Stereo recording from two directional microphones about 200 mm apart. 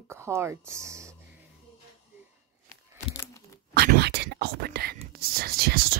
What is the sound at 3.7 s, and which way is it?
Whispering, 55° right (ahead or behind).